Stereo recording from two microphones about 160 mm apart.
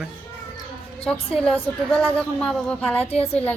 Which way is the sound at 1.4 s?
5° left (ahead or behind).